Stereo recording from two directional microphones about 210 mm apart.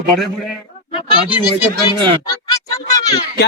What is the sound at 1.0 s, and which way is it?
Speech, 20° left (ahead or behind).